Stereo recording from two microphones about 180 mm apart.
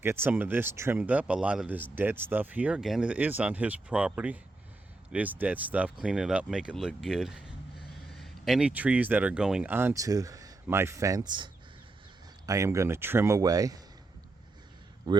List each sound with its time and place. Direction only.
0.0 s speech: 10° right (ahead or behind)
15.1 s speech: 20° right (ahead or behind)